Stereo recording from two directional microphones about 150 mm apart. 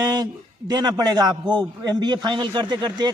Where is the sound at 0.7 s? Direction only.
25° right (ahead or behind).